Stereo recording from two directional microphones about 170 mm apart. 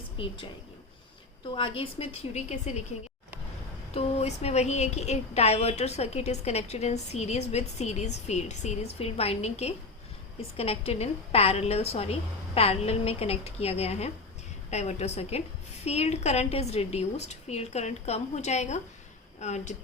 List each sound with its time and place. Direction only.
0.2 s a woman's voice: 30° left (ahead or behind)
1.5 s a woman's voice: 30° left (ahead or behind)
3.9 s a woman's voice: 40° left (ahead or behind)